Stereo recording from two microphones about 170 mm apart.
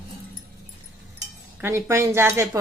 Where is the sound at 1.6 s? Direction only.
15° right (ahead or behind).